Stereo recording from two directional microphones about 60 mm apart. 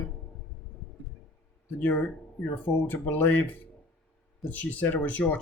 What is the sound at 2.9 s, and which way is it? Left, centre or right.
Speech, left.